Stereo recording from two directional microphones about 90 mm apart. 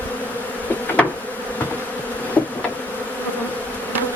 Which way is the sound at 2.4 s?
20° left (ahead or behind).